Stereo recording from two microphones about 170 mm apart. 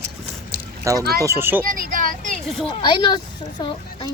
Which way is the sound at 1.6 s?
55° right (ahead or behind).